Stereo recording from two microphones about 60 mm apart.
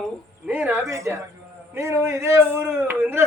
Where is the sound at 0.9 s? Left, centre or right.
Right.